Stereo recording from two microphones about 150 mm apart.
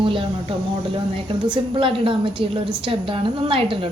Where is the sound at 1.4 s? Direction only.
30° right (ahead or behind).